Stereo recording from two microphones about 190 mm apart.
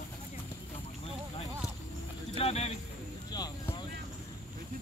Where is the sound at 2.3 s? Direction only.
35° left (ahead or behind).